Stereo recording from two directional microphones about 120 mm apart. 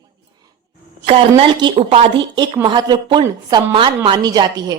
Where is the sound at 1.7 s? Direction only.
55° right (ahead or behind).